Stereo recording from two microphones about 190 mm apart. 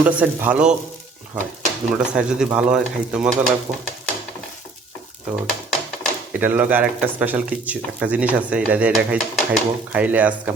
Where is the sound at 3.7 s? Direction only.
20° right (ahead or behind).